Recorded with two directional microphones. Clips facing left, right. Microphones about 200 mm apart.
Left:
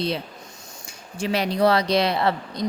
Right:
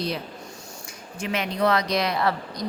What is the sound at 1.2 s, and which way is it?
Speech, 35° left (ahead or behind).